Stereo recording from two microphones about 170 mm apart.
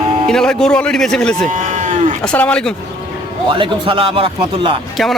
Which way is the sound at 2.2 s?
5° left (ahead or behind).